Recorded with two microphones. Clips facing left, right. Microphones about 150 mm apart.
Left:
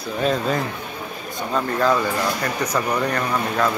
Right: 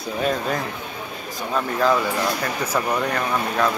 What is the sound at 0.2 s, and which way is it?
Speech, 5° right (ahead or behind).